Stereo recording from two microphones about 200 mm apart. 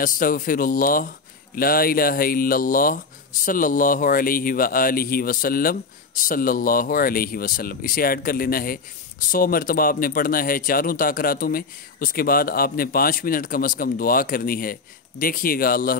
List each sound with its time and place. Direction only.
0.0 s speech: 45° left (ahead or behind)